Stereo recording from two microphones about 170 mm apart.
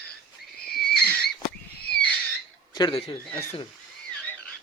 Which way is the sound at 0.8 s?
5° left (ahead or behind).